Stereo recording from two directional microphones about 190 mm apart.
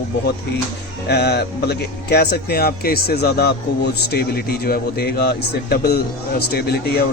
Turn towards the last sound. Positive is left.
turn(degrees=55)  # may be behind; listen again after turning